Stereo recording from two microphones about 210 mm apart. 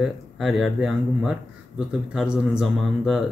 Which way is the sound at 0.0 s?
Centre (ahead or behind).